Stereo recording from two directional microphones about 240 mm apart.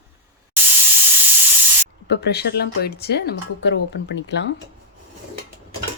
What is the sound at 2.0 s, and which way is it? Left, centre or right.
Speech, left.